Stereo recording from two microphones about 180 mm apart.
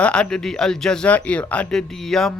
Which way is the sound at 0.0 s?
5° left (ahead or behind).